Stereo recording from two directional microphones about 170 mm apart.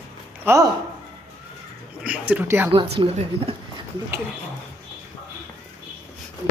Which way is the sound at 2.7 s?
35° right (ahead or behind).